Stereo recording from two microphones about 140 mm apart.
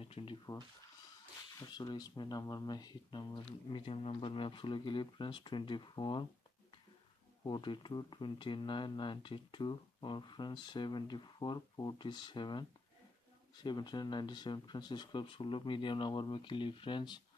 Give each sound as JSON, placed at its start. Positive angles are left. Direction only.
{"t": 0.0, "sound": "speech", "side_deg": 40}
{"t": 1.6, "sound": "speech", "side_deg": 30}
{"t": 7.4, "sound": "speech", "side_deg": 35}